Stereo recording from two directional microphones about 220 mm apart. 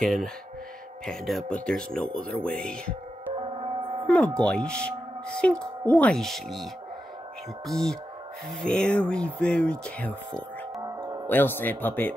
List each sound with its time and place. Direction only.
0.0 s speech: centre (ahead or behind)
3.3 s music: 30° right (ahead or behind)
4.4 s speech: 5° left (ahead or behind)
10.8 s music: 15° right (ahead or behind)
11.2 s speech: 10° left (ahead or behind)